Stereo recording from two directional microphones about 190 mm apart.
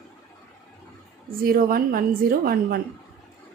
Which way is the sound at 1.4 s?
50° right (ahead or behind).